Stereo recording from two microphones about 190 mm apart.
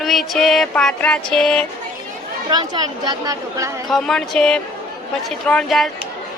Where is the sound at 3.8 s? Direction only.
Centre (ahead or behind).